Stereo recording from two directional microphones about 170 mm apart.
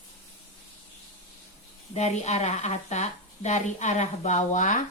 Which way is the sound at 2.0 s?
40° left (ahead or behind).